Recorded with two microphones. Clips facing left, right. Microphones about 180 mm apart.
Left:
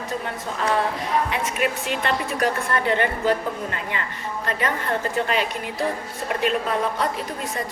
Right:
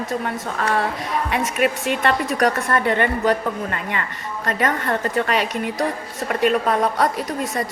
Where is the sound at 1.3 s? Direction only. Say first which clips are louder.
Right 4 dB; 50° right (ahead or behind).